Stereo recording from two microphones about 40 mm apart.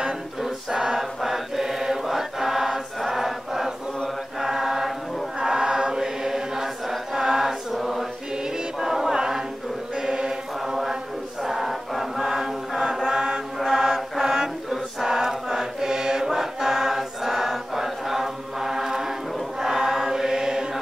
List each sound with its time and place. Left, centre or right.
0.4 s mantra: centre
4.4 s chant: centre
5.4 s choir: centre
7.7 s mantra: centre
8.7 s choir: centre
9.9 s mantra: centre
11.4 s chant: centre
13.0 s chant: right
13.6 s mantra: centre
14.7 s chant: centre